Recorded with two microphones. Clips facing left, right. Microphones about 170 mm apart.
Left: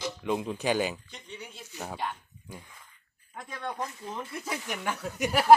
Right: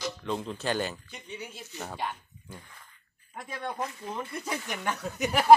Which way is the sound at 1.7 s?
10° left (ahead or behind).